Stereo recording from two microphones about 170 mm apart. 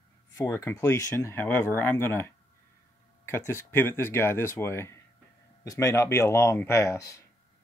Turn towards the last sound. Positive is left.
turn(degrees=20)  # may be behind; listen again after turning